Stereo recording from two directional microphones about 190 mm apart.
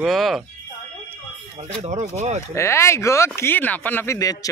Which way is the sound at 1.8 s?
40° right (ahead or behind).